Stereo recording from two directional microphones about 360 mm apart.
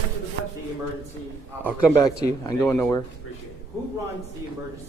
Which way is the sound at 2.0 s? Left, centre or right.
Centre.